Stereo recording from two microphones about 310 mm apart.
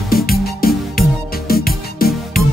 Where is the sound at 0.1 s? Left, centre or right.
Left.